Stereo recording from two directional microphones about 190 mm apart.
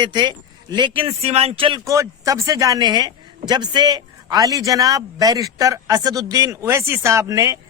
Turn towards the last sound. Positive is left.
turn(degrees=-15)  # may be behind; listen again after turning